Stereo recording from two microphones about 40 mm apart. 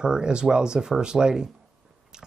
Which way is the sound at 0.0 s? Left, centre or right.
Centre.